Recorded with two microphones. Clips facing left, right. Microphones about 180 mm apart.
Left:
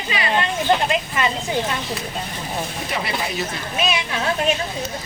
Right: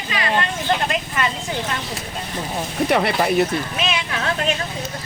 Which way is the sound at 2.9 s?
60° right (ahead or behind).